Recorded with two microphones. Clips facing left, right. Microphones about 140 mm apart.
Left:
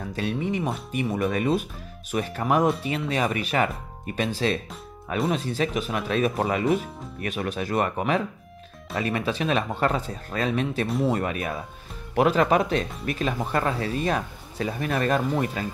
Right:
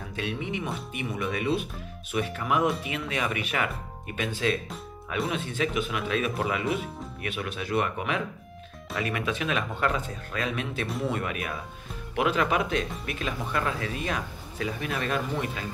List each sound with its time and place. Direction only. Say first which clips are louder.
0.1 s speech: left 5 dB; 40° left (ahead or behind)